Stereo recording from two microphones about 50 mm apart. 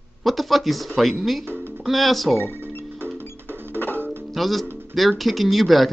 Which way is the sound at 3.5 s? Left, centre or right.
Right.